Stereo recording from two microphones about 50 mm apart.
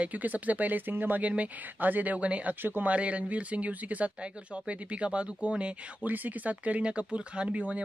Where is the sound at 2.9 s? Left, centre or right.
Right.